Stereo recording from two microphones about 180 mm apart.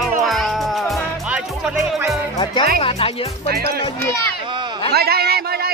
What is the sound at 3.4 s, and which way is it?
Speech, 60° right (ahead or behind).